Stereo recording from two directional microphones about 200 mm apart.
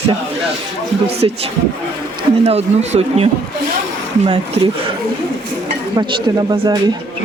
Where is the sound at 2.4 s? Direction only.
30° right (ahead or behind).